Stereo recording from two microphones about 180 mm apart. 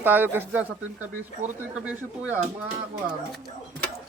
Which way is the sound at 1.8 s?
10° right (ahead or behind).